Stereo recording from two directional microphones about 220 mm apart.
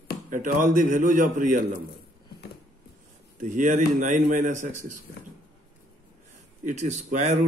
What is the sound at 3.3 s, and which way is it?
A man's voice, 35° right (ahead or behind).